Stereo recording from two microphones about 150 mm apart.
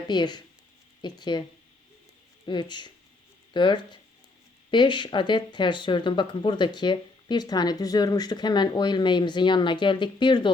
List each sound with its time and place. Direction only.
0.1 s speech: 30° left (ahead or behind)
2.5 s speech: 30° left (ahead or behind)